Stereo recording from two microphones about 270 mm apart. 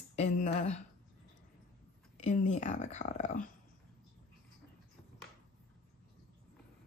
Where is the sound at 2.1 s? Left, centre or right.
Left.